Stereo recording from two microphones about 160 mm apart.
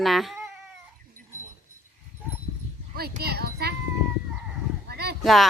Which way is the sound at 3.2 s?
80° right.